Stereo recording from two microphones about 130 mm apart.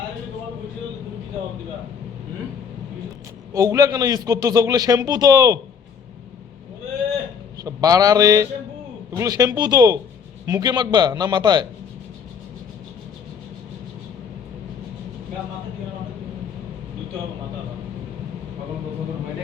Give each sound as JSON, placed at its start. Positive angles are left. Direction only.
{"t": 3.5, "sound": "a man's voice", "side_deg": -25}
{"t": 7.6, "sound": "a man's voice", "side_deg": -30}